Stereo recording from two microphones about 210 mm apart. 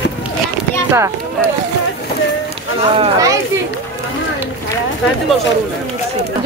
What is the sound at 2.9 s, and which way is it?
Speech, 25° right (ahead or behind).